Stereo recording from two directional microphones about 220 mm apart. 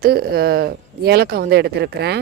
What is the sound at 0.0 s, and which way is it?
Speech, 45° right (ahead or behind).